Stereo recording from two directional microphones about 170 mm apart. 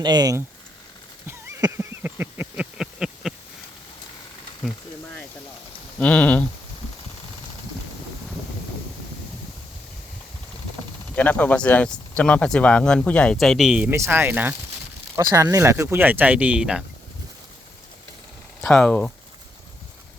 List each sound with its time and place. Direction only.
0.0 s speech: 25° right (ahead or behind)
1.3 s a sound: 15° right (ahead or behind)
6.0 s speech: 10° left (ahead or behind)
11.1 s speech: 10° left (ahead or behind)
13.9 s speech: 15° right (ahead or behind)
18.6 s speech: 5° left (ahead or behind)